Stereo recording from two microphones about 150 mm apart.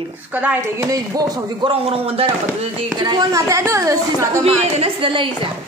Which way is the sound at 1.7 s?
40° right (ahead or behind).